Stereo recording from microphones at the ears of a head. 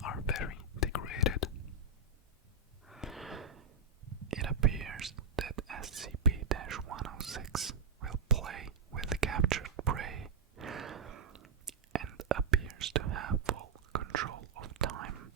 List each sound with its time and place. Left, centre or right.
0.0 s whispering: left
2.8 s a sound: centre
3.5 s whispering: right